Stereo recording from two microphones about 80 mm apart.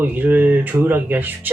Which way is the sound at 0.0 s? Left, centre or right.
Right.